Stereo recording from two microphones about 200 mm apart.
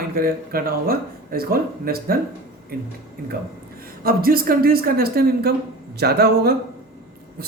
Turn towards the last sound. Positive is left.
turn(degrees=-50)  # may be behind; listen again after turning